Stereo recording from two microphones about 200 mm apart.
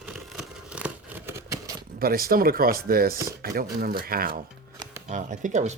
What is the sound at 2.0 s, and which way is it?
Speech, 50° right (ahead or behind).